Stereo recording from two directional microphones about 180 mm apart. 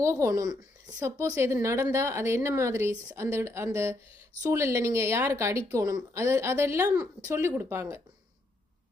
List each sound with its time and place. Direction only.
0.0 s a woman's voice: 15° right (ahead or behind)